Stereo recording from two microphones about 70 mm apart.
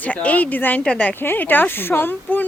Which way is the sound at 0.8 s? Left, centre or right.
Centre.